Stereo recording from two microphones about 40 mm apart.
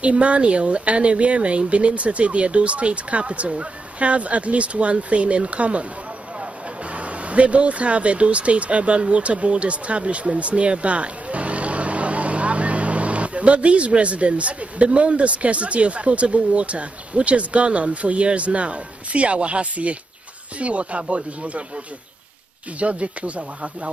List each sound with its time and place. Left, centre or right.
0.0 s speech: right